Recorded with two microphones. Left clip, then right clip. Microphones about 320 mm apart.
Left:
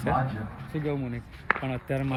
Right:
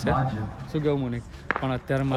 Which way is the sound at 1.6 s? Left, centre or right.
Centre.